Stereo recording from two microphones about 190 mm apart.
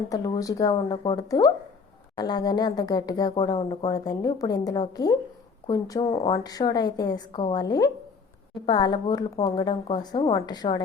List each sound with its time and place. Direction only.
0.1 s speech: 20° left (ahead or behind)